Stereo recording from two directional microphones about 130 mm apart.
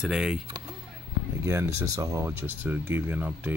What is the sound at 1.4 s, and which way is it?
Speech, 25° right (ahead or behind).